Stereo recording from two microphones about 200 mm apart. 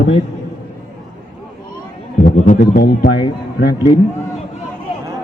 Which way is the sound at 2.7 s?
50° left (ahead or behind).